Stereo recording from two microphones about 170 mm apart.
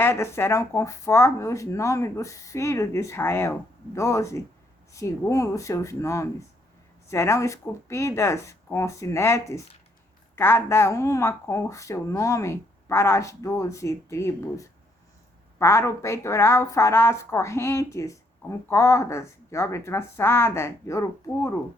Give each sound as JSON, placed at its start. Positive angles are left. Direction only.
{"t": 0.0, "sound": "speech", "side_deg": 15}